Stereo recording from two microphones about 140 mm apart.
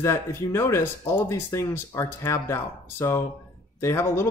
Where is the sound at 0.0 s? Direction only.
20° left (ahead or behind).